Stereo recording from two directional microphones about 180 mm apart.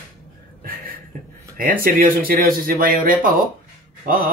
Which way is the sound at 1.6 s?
55° right (ahead or behind).